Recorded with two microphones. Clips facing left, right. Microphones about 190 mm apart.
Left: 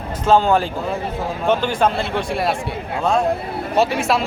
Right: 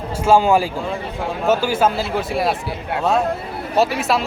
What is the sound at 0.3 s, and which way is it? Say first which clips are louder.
A man's voice: right 1 dB; 10° right (ahead or behind).